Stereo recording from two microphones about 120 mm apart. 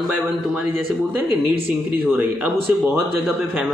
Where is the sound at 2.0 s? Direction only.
15° right (ahead or behind).